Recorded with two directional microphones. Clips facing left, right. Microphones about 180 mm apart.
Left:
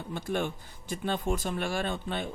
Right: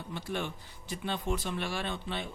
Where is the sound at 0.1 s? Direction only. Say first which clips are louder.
Left 5 dB; 50° left (ahead or behind).